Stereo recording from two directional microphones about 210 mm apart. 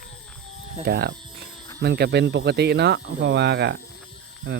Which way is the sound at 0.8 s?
50° right (ahead or behind).